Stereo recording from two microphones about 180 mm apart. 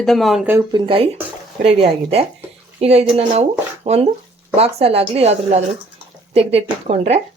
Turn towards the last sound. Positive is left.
turn(degrees=-35)  # may be behind; listen again after turning